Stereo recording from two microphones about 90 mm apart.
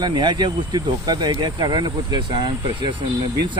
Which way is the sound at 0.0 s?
55° right (ahead or behind).